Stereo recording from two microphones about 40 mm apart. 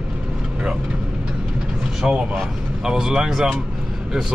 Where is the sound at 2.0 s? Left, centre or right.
Centre.